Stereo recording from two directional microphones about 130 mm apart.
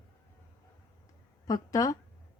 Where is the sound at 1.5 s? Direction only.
25° left (ahead or behind).